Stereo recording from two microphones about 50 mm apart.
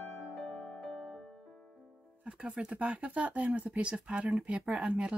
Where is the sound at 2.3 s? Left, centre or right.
Right.